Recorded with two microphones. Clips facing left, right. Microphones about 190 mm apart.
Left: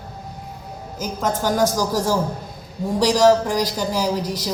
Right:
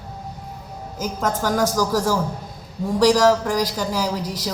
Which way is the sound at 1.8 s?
15° left (ahead or behind).